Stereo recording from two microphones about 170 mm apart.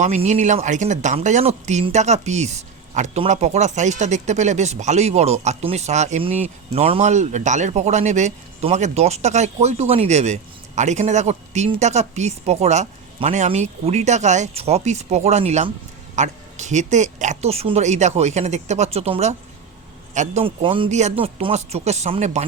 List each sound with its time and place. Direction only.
0.0 s speech: 45° right (ahead or behind)